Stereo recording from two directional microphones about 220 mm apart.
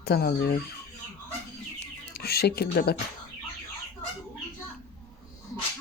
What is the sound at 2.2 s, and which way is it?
Speech, 45° left (ahead or behind).